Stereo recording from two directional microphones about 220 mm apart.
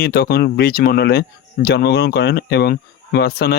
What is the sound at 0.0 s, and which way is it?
Speech, 45° left (ahead or behind).